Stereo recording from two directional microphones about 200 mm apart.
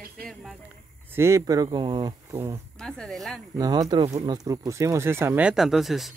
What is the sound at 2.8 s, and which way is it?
Speech, 5° left (ahead or behind).